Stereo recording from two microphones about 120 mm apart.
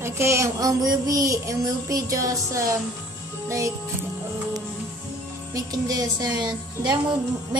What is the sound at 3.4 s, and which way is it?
Music, 25° right (ahead or behind).